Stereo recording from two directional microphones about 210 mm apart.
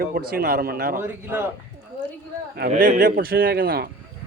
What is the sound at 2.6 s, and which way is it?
Speech, 40° right (ahead or behind).